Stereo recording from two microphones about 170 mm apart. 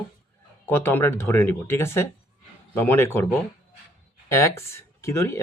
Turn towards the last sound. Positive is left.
turn(degrees=15)  # may be behind; listen again after turning